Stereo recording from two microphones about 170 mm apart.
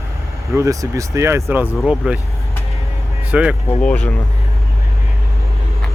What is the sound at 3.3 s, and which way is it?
Speech, 5° right (ahead or behind).